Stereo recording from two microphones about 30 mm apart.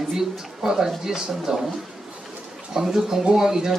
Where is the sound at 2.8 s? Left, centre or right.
Centre.